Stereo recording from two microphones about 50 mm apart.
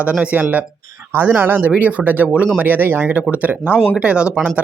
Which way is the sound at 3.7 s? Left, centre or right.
Left.